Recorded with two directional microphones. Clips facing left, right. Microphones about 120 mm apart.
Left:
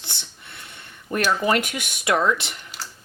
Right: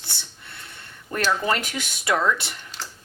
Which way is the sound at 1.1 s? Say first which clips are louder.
Left 2 dB; 15° left (ahead or behind).